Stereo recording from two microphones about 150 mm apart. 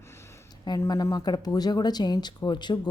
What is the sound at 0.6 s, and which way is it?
Speech, 25° left (ahead or behind).